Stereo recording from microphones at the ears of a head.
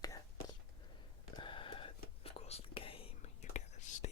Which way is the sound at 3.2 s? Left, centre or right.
Left.